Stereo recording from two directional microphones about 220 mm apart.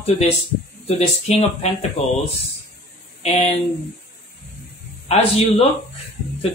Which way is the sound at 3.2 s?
30° left (ahead or behind).